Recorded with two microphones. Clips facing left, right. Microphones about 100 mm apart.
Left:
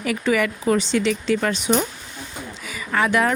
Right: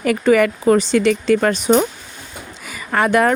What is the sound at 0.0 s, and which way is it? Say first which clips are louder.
Speech: right 7 dB; 50° right (ahead or behind).